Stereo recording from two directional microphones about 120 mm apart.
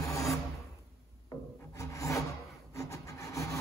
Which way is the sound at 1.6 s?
25° left (ahead or behind).